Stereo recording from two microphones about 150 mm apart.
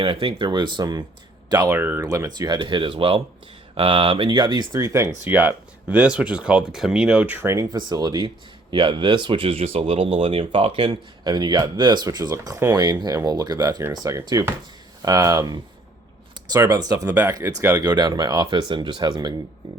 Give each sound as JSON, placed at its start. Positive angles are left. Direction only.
{"t": 0.0, "sound": "speech", "side_deg": -35}